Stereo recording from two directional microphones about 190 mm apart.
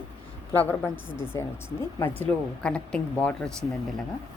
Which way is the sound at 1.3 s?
15° left (ahead or behind).